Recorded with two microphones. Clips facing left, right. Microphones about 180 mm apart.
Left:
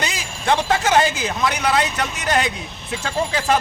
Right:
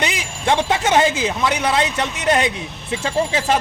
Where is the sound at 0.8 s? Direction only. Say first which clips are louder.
Right 1 dB; 25° right (ahead or behind).